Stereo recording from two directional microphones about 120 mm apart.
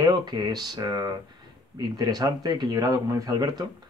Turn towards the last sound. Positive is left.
turn(degrees=-35)  # may be behind; listen again after turning